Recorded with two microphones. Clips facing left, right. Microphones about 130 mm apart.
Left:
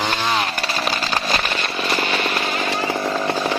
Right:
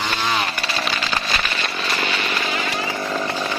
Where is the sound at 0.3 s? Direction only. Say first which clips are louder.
Left 1 dB; 40° left (ahead or behind).